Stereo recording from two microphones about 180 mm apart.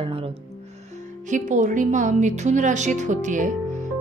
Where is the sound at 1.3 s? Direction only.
45° right (ahead or behind).